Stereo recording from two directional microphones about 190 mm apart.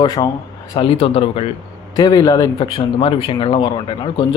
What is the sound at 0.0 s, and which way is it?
Speech, 20° left (ahead or behind).